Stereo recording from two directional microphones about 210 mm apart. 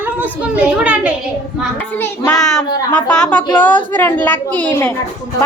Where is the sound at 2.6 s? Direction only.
20° left (ahead or behind).